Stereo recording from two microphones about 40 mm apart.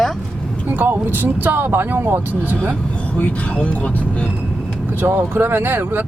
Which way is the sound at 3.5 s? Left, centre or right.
Left.